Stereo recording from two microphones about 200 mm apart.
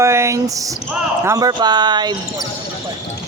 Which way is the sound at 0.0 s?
15° right (ahead or behind).